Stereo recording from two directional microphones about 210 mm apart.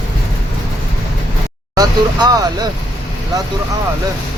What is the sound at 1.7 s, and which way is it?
Speech, 20° right (ahead or behind).